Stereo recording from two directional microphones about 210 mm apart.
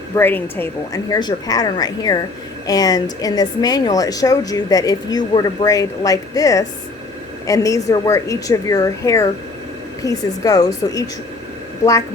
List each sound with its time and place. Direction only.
0.2 s a woman's voice: 10° left (ahead or behind)